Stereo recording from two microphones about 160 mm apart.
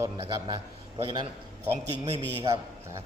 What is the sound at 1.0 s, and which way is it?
Speech, 30° right (ahead or behind).